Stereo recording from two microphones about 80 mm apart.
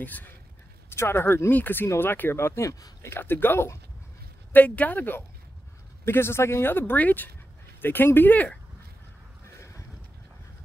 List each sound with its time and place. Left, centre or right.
0.0 s speech: left